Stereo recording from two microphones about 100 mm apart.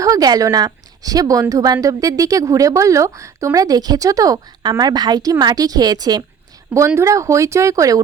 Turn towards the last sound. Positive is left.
turn(degrees=-35)  # may be behind; listen again after turning